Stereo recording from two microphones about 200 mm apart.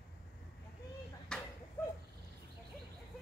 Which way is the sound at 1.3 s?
5° left (ahead or behind).